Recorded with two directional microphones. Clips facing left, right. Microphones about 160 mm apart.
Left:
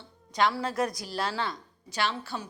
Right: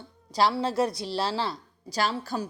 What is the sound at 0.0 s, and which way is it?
Speech, 35° right (ahead or behind).